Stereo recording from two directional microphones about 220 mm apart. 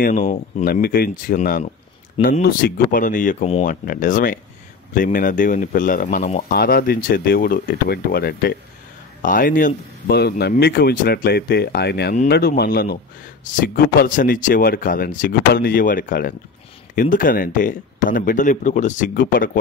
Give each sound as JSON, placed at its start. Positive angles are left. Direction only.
{"t": 0.0, "sound": "speech", "side_deg": 40}